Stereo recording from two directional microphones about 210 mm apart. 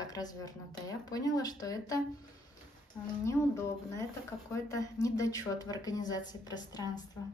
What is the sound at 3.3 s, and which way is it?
Speech, 15° left (ahead or behind).